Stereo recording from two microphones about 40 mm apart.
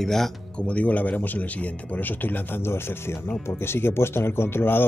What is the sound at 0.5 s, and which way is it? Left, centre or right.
Speech, left.